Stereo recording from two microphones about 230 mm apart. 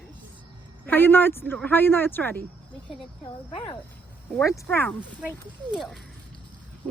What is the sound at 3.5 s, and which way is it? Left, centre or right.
Speech, left.